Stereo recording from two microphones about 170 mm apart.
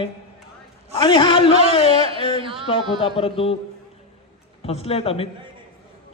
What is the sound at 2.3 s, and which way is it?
Speech, 30° right (ahead or behind).